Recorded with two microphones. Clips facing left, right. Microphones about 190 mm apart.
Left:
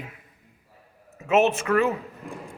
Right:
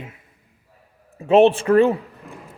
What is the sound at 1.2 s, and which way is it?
Speech, 30° right (ahead or behind).